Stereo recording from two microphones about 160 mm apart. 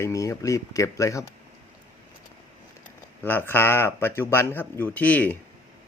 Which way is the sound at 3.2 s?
10° left (ahead or behind).